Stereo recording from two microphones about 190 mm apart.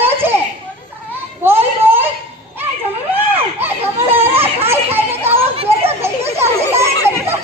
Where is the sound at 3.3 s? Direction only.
10° right (ahead or behind).